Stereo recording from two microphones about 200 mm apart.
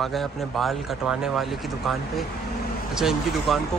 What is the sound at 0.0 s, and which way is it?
Speech, centre (ahead or behind).